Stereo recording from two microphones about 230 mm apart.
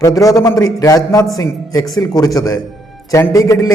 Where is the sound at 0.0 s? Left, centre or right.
Centre.